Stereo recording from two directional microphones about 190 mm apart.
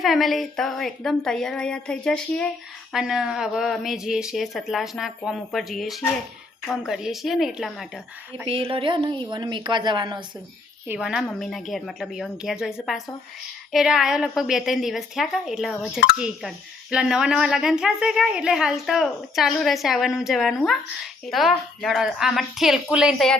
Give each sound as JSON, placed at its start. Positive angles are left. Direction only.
{"t": 0.0, "sound": "speech", "side_deg": 0}
{"t": 8.4, "sound": "speech", "side_deg": -30}
{"t": 10.8, "sound": "speech", "side_deg": -5}